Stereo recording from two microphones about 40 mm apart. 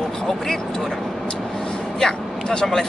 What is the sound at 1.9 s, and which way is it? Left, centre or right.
Vehicle, centre.